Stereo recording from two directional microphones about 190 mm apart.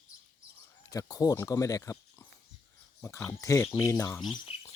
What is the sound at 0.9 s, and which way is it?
Speech, 20° left (ahead or behind).